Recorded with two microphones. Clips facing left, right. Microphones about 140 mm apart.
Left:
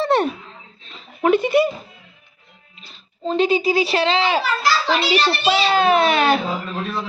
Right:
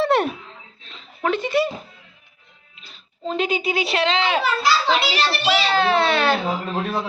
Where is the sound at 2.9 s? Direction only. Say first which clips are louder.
Left 4 dB; centre (ahead or behind).